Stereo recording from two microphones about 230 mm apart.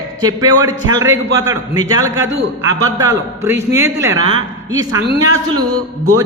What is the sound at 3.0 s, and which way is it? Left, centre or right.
A man's voice, centre.